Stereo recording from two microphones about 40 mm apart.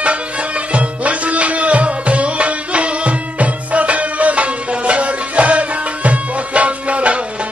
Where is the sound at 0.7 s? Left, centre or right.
Right.